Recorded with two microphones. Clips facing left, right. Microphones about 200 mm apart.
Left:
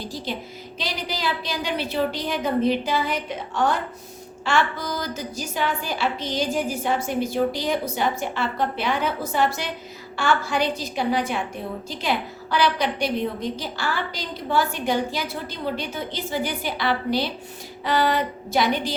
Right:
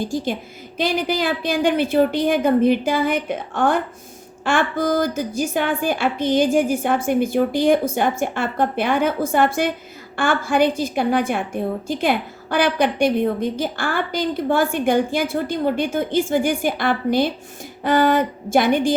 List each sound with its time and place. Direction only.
0.0 s a woman's voice: 50° right (ahead or behind)